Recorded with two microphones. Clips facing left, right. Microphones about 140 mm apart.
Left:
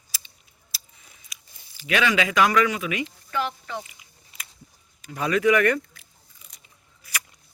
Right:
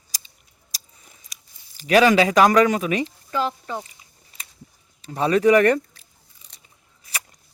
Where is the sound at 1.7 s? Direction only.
40° right (ahead or behind).